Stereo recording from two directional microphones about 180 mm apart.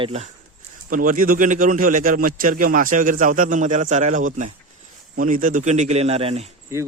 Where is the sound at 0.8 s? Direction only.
50° right (ahead or behind).